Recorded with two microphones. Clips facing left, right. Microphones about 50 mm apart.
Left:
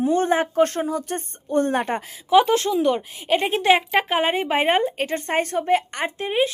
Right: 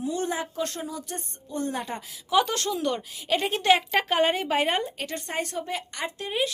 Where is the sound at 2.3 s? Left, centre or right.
Left.